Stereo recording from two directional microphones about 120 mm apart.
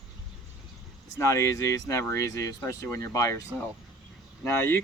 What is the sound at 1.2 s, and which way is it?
Speech, 25° left (ahead or behind).